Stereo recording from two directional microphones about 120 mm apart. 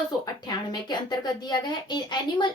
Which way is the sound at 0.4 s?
35° left (ahead or behind).